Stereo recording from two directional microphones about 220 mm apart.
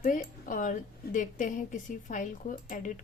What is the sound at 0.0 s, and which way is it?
A woman's voice, 40° left (ahead or behind).